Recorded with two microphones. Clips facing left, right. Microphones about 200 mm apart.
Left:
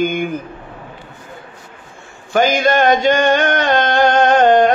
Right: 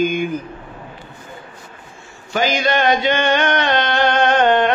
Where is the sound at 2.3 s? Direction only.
50° left (ahead or behind).